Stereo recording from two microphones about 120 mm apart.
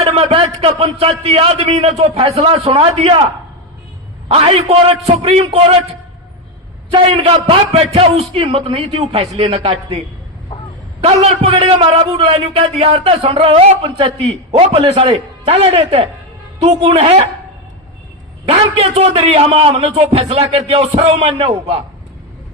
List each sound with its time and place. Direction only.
0.0 s a man's voice: 55° right (ahead or behind)
4.3 s a man's voice: 50° right (ahead or behind)
7.1 s a man's voice: 55° right (ahead or behind)
11.0 s a man's voice: 60° right (ahead or behind)
18.4 s a man's voice: 55° right (ahead or behind)